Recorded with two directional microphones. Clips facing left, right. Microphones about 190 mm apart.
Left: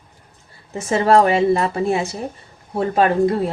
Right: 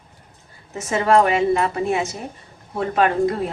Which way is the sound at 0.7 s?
30° left (ahead or behind).